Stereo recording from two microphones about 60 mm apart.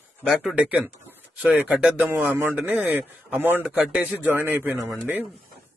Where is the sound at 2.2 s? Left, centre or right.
Right.